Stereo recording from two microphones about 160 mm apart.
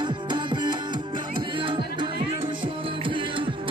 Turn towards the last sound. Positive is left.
turn(degrees=-30)  # may be behind; listen again after turning